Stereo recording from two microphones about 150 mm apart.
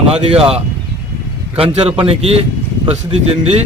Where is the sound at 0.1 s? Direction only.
40° right (ahead or behind).